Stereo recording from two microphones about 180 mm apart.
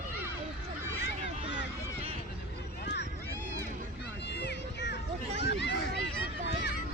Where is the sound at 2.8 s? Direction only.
70° left (ahead or behind).